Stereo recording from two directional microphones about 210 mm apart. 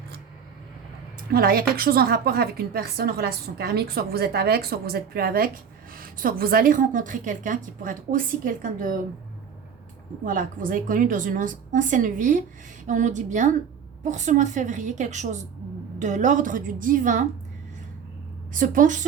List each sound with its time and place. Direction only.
1.3 s a woman's voice: 45° right (ahead or behind)
10.2 s a woman's voice: 40° right (ahead or behind)
18.5 s a woman's voice: 40° right (ahead or behind)